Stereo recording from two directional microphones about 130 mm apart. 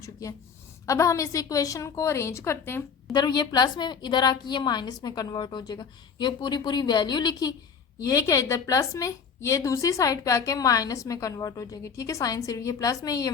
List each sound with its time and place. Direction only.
0.0 s a woman's voice: 25° left (ahead or behind)
3.1 s a woman's voice: 30° left (ahead or behind)